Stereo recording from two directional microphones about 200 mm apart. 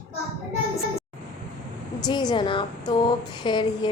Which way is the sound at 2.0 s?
20° left (ahead or behind).